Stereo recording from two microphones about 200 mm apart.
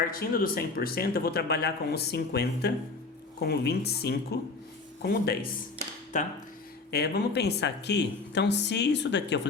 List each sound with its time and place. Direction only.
0.1 s speech: 45° left (ahead or behind)
6.1 s speech: 40° left (ahead or behind)
6.9 s a woman's voice: 55° left (ahead or behind)